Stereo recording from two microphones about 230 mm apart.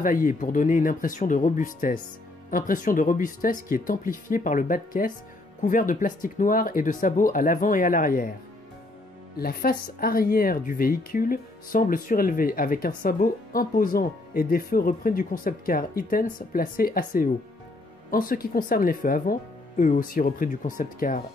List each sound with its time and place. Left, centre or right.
0.0 s speech: left
9.4 s speech: left